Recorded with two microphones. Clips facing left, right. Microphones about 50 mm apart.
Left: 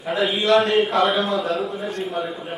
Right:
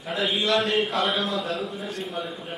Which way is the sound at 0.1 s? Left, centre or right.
Centre.